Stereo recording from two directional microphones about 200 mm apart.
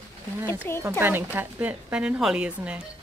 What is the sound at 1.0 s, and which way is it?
A woman's voice, 10° right (ahead or behind).